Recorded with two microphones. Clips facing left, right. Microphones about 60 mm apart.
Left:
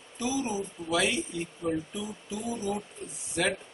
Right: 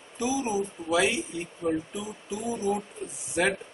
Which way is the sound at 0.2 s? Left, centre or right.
Centre.